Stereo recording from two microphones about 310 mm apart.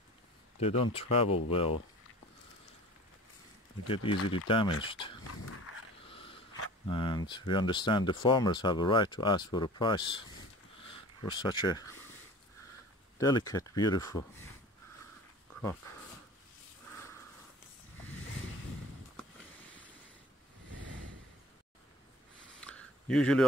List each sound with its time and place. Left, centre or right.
0.6 s speech: centre
3.8 s speech: centre
6.1 s a sound: centre
6.9 s speech: centre
13.2 s speech: centre
22.6 s a sound: centre